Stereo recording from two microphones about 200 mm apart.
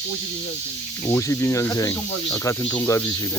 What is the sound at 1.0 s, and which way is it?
Speech, 15° left (ahead or behind).